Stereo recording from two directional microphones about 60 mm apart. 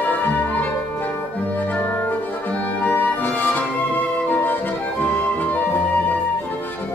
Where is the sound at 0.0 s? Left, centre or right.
Left.